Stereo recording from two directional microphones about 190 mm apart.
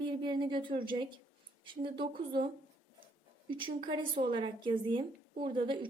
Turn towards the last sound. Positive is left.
turn(degrees=-25)  # may be behind; listen again after turning